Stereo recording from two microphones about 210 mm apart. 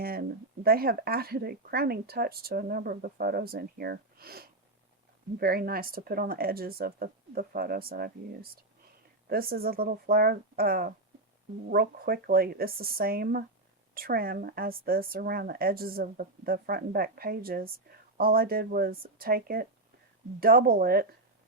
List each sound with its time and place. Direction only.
0.0 s speech: 45° right (ahead or behind)